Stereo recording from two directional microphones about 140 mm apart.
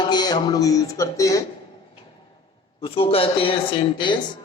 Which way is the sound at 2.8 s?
45° left (ahead or behind).